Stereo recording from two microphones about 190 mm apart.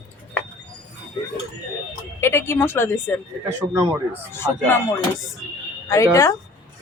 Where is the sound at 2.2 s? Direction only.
15° left (ahead or behind).